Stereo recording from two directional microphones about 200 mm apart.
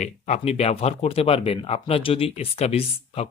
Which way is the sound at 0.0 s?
35° left (ahead or behind).